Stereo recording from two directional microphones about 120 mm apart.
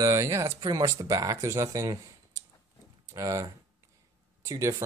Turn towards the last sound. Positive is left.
turn(degrees=-25)  # may be behind; listen again after turning